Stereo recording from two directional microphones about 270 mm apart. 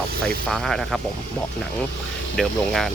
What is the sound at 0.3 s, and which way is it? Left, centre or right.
Speech, centre.